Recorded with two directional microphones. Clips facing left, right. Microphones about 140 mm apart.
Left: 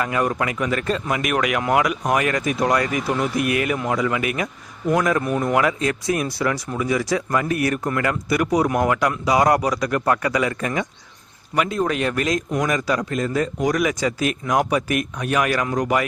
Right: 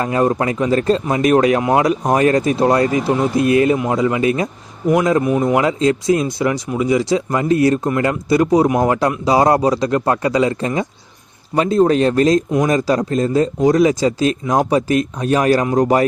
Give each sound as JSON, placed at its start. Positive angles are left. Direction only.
{"t": 0.0, "sound": "speech", "side_deg": -30}